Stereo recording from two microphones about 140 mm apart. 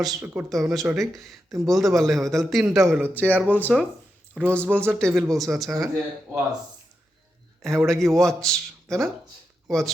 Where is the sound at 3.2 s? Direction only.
10° right (ahead or behind).